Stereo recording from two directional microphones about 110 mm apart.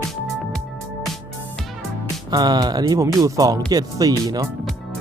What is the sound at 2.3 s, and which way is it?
Speech, 40° right (ahead or behind).